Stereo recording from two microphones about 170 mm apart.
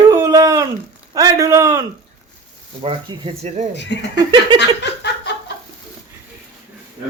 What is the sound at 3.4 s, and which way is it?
Speech, 40° right (ahead or behind).